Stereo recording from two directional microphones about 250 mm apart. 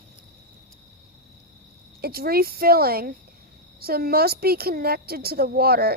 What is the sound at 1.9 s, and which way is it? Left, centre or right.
A woman's voice, right.